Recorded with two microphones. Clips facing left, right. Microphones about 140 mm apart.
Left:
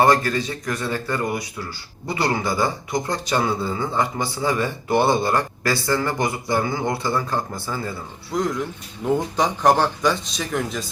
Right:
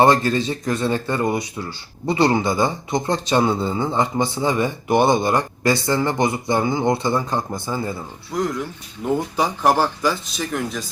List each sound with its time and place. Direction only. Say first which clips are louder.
0.0 s speech: right 2 dB; 25° right (ahead or behind)
8.3 s speech: even; centre (ahead or behind)